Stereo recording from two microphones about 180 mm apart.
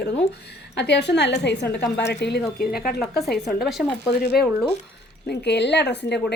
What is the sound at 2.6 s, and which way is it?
Speech, 55° left (ahead or behind).